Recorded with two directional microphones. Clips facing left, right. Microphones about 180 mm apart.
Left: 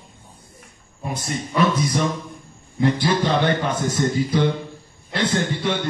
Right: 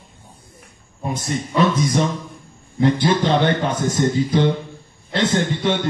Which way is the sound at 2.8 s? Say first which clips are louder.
Right 2 dB; 25° right (ahead or behind).